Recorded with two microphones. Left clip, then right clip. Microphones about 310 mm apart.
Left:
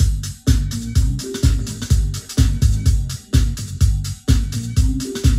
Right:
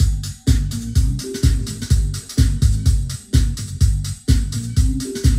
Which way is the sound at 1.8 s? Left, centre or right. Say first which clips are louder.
Even; left.